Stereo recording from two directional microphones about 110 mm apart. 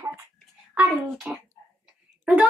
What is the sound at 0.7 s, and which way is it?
Speech, 10° right (ahead or behind).